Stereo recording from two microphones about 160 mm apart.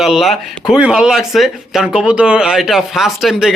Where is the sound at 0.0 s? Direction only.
Centre (ahead or behind).